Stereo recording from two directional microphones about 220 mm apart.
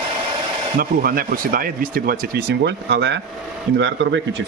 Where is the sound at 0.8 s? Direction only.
40° right (ahead or behind); by 4.2 s 55° right (ahead or behind).